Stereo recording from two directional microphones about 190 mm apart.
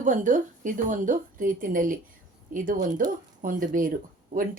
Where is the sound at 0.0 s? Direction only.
45° right (ahead or behind).